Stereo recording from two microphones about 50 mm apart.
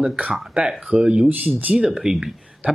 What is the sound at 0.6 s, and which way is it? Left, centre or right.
Speech, right.